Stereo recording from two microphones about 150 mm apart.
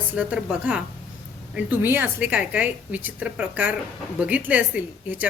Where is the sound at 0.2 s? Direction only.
10° right (ahead or behind).